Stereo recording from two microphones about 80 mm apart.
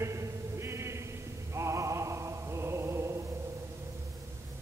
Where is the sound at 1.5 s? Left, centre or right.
Right.